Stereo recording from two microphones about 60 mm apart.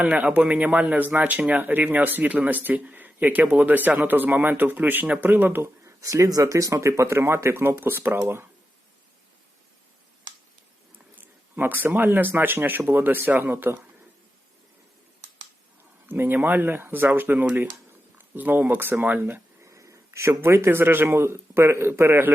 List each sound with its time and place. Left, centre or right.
0.0 s speech: right
5.6 s speech: right
10.9 s speech: right
16.0 s speech: right
19.6 s a man's voice: right